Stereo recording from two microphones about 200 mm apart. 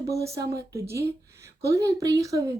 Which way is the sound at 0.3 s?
15° right (ahead or behind).